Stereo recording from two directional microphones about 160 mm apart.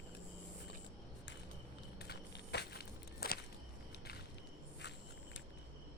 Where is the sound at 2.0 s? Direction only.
90° left.